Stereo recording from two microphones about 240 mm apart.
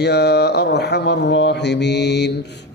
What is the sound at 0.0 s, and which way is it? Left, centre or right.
Mantra, left.